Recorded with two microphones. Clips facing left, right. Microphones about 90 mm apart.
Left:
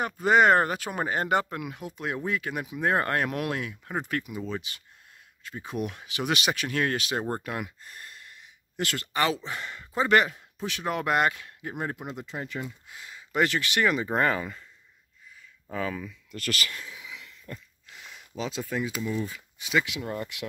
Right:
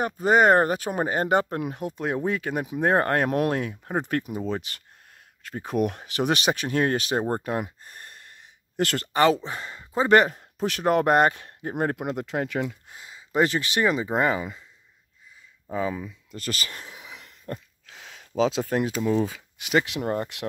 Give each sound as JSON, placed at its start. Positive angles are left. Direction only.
{"t": 0.2, "sound": "speech", "side_deg": -40}
{"t": 12.9, "sound": "speech", "side_deg": -25}
{"t": 14.0, "sound": "speech", "side_deg": -15}
{"t": 15.6, "sound": "a sound", "side_deg": -20}
{"t": 17.8, "sound": "a sound", "side_deg": -85}
{"t": 19.0, "sound": "speech", "side_deg": -90}
{"t": 19.7, "sound": "speech", "side_deg": -50}